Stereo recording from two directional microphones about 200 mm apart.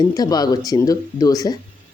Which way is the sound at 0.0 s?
20° left (ahead or behind).